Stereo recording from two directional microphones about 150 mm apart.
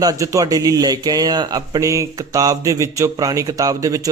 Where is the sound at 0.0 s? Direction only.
20° right (ahead or behind).